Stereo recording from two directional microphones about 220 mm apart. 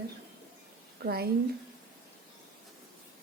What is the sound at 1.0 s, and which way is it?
Speech, 45° right (ahead or behind).